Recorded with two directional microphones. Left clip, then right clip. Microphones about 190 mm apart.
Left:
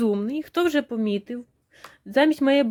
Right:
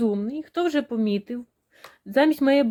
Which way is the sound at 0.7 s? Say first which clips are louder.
Even; 10° left (ahead or behind).